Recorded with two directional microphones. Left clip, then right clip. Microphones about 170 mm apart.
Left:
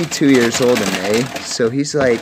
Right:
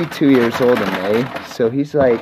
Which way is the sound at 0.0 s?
25° left (ahead or behind).